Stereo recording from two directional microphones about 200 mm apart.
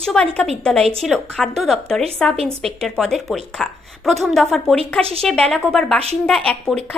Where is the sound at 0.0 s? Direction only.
5° left (ahead or behind).